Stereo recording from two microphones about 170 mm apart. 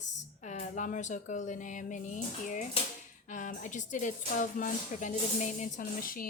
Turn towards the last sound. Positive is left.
turn(degrees=55)  # may be behind; listen again after turning